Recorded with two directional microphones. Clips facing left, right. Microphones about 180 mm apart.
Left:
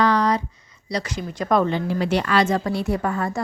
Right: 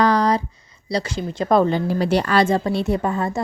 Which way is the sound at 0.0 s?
35° right (ahead or behind).